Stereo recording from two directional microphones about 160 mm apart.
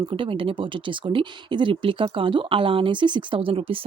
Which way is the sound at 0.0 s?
30° right (ahead or behind).